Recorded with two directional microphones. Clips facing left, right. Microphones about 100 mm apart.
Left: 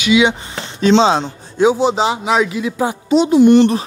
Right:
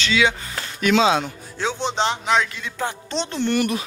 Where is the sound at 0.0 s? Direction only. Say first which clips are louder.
Left 7 dB; 20° left (ahead or behind).